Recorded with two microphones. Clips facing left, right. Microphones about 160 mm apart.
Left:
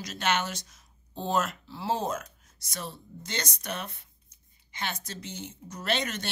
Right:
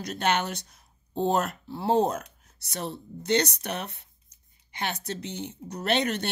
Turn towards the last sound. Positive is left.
turn(degrees=-60)  # may be behind; listen again after turning